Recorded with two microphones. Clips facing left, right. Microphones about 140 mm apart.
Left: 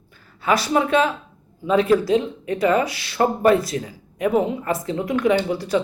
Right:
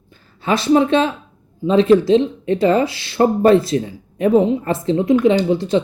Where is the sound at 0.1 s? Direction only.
25° right (ahead or behind).